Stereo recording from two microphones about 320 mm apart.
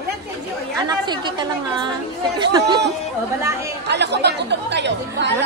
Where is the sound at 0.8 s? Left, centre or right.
Centre.